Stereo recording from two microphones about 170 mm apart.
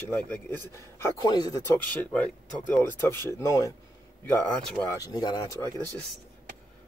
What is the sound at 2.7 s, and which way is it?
Speech, 10° left (ahead or behind).